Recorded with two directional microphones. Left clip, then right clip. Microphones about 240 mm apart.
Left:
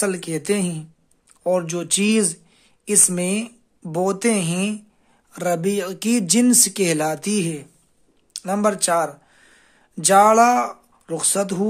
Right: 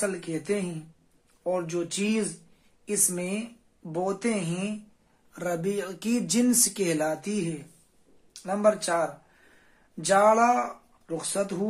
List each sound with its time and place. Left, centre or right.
0.0 s speech: left